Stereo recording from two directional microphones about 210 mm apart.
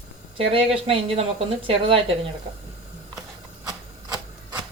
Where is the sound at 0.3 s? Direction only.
25° right (ahead or behind).